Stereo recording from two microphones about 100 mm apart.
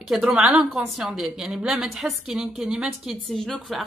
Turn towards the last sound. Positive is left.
turn(degrees=0)  # may be behind; listen again after turning